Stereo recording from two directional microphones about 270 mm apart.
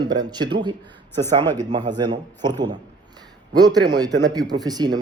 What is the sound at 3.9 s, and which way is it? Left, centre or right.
Speech, centre.